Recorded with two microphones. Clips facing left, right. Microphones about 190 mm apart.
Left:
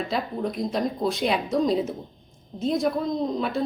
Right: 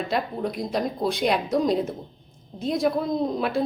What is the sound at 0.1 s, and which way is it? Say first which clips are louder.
Speech: right 1 dB; centre (ahead or behind).